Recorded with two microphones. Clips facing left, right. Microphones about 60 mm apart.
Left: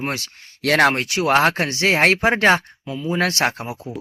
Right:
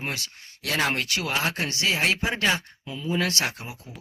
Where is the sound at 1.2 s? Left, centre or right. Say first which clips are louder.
Left 14 dB; left.